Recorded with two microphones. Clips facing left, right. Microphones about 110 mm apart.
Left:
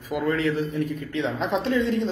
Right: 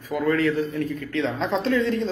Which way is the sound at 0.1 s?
20° left (ahead or behind).